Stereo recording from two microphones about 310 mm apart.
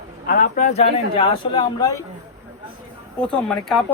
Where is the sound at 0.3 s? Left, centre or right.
Left.